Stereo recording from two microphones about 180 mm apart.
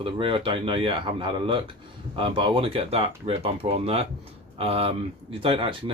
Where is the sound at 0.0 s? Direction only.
30° right (ahead or behind).